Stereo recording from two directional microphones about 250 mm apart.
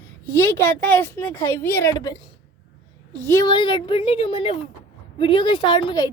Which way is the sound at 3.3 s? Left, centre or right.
Centre.